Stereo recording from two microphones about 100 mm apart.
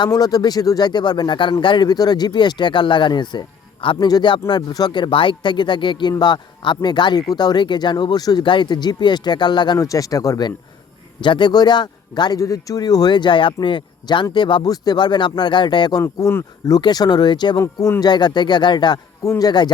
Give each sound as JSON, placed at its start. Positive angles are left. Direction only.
{"t": 0.1, "sound": "speech", "side_deg": 40}
{"t": 9.7, "sound": "speech", "side_deg": 35}
{"t": 11.2, "sound": "speech", "side_deg": 50}
{"t": 17.6, "sound": "speech", "side_deg": 30}
{"t": 18.0, "sound": "speech", "side_deg": 45}
{"t": 19.2, "sound": "speech", "side_deg": 30}
{"t": 19.5, "sound": "speech", "side_deg": 45}